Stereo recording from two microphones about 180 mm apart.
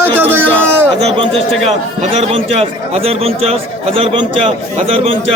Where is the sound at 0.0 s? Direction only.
10° right (ahead or behind).